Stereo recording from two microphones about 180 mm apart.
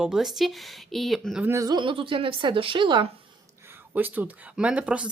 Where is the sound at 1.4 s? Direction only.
15° right (ahead or behind).